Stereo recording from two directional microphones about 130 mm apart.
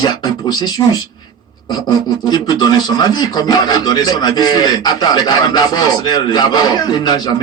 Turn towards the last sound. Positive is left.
turn(degrees=30)  # may be behind; listen again after turning